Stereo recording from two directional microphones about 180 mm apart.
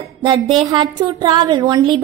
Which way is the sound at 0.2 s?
25° right (ahead or behind).